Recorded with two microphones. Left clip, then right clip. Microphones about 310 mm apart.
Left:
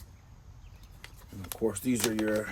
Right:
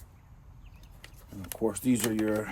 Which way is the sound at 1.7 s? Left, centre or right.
Centre.